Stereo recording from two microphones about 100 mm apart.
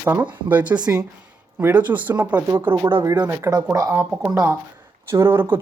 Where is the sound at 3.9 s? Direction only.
20° right (ahead or behind).